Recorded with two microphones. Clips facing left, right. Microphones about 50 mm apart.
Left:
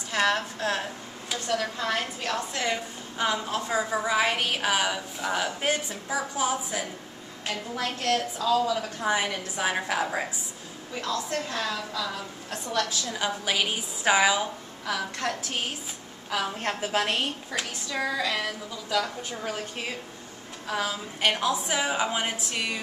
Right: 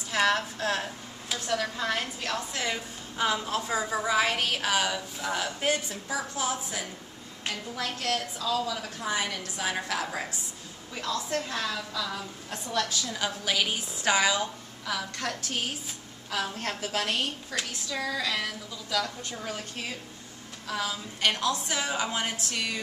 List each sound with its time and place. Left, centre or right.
0.1 s a woman's voice: centre
11.2 s a woman's voice: centre